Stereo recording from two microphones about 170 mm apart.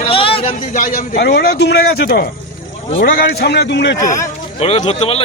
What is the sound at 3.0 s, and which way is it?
Speech, 60° left (ahead or behind).